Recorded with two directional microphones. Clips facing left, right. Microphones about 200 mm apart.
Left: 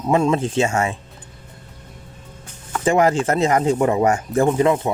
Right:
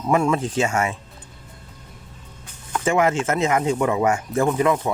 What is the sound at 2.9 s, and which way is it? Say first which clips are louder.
Speech: left 3 dB; 35° left (ahead or behind).